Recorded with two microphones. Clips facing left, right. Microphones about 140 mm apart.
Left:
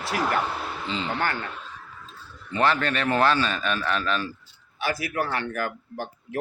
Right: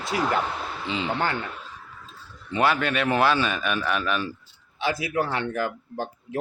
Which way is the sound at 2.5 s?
10° right (ahead or behind).